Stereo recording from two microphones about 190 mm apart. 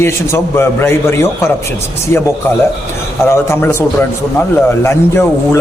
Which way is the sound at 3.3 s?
10° left (ahead or behind).